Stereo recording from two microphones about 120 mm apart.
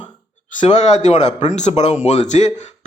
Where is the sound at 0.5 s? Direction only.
85° left.